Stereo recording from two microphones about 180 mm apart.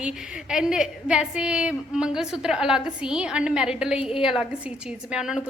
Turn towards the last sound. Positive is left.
turn(degrees=-5)  # may be behind; listen again after turning